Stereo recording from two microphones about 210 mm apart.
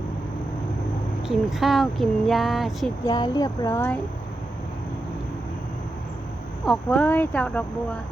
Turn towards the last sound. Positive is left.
turn(degrees=5)  # may be behind; listen again after turning